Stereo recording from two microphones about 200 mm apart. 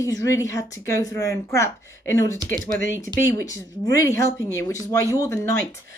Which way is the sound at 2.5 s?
45° right (ahead or behind).